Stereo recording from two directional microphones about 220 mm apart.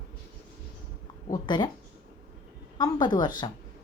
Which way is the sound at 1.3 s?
20° left (ahead or behind).